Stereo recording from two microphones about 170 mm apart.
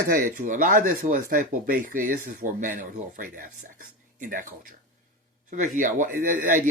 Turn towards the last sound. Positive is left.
turn(degrees=-50)  # may be behind; listen again after turning